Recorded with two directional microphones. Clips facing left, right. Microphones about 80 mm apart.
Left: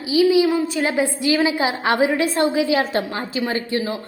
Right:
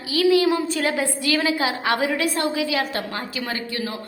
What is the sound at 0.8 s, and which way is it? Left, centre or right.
A woman's voice, left.